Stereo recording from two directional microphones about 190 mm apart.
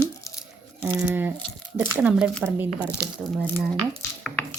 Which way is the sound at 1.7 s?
10° right (ahead or behind).